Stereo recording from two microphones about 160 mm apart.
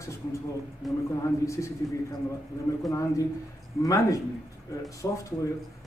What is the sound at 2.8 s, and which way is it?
Speech, 20° left (ahead or behind).